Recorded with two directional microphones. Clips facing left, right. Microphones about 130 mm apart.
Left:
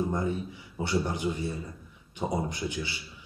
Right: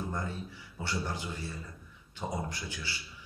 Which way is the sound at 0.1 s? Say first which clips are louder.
Left 7 dB; 20° left (ahead or behind).